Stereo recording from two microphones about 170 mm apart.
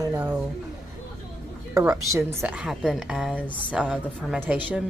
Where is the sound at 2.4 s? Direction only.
5° right (ahead or behind).